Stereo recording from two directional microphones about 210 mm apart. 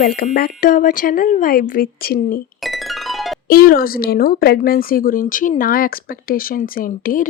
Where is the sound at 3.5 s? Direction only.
45° left (ahead or behind).